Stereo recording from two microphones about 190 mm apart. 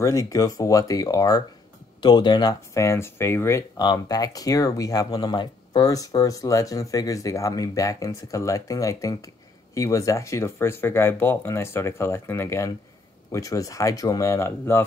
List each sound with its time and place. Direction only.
0.0 s speech: 15° left (ahead or behind)